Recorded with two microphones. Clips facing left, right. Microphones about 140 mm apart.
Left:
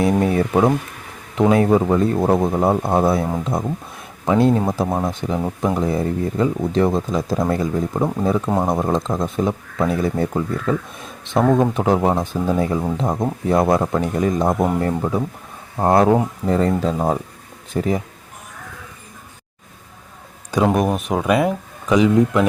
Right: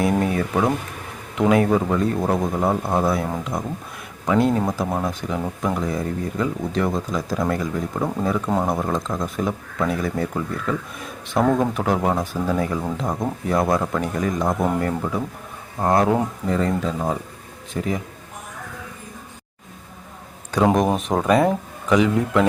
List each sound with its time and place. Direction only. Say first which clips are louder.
0.2 s speech: left 4 dB; 25° left (ahead or behind)
20.7 s speech: even; 5° left (ahead or behind)